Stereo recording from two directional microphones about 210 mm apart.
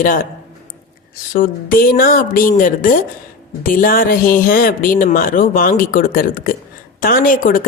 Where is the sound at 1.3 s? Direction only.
40° left (ahead or behind).